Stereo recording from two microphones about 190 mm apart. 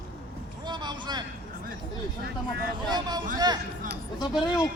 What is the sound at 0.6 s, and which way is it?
Boat, 25° right (ahead or behind).